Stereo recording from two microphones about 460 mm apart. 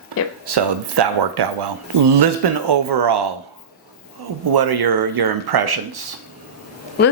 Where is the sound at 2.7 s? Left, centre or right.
Right.